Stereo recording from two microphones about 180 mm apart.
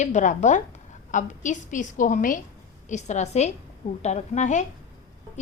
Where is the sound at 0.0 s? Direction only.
45° left (ahead or behind).